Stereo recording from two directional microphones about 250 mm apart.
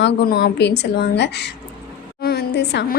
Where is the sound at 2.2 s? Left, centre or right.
Left.